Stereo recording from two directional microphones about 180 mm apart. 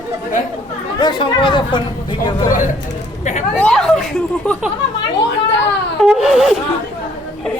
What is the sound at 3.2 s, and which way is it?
Chatter, 40° left (ahead or behind).